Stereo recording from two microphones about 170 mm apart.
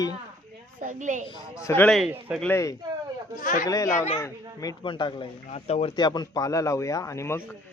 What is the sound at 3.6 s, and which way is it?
Speech, 20° left (ahead or behind).